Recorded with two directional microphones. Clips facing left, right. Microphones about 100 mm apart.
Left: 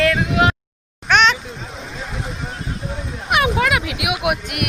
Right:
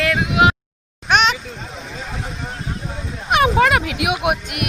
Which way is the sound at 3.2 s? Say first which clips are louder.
Right 3 dB; 35° right (ahead or behind).